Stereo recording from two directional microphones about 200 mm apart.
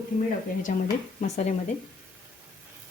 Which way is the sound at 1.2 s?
35° left (ahead or behind).